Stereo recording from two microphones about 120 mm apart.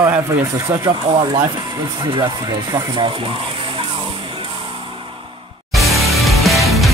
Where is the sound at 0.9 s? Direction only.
40° right (ahead or behind).